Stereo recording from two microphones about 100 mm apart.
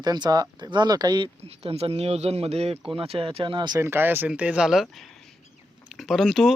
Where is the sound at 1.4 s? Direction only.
90° right.